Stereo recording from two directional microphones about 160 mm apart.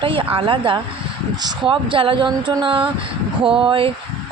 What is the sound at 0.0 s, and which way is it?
Speech, 35° right (ahead or behind).